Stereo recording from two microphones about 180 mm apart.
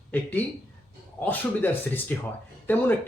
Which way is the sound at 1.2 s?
10° left (ahead or behind).